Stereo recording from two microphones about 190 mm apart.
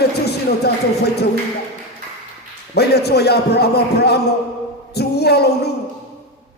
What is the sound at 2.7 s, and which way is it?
Speech, 60° left (ahead or behind).